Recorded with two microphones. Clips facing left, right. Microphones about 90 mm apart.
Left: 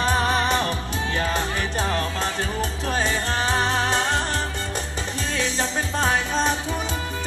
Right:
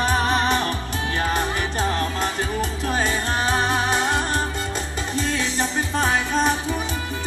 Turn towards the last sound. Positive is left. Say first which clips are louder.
# right 1 dB
turn(degrees=-15)  # may be behind; listen again after turning